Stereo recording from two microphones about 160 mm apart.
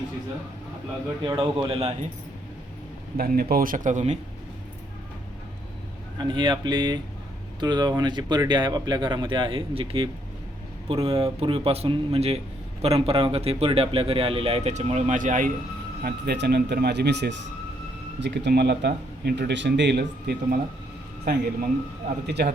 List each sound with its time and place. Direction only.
1.2 s speech: 25° right (ahead or behind)
1.6 s a man's voice: 35° right (ahead or behind)
3.2 s speech: 65° right (ahead or behind); by 4.2 s 50° right (ahead or behind)
6.1 s a man's voice: 30° right (ahead or behind); by 15.5 s 55° right (ahead or behind)
16.0 s a man's voice: 90° right
22.3 s a man's voice: 90° right